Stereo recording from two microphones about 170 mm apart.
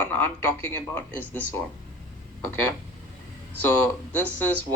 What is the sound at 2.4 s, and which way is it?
Speech, 10° left (ahead or behind).